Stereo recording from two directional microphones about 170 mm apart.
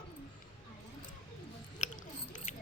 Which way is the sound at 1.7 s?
45° left (ahead or behind).